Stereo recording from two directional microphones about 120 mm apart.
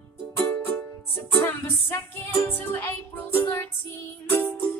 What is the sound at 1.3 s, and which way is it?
Music, 20° left (ahead or behind).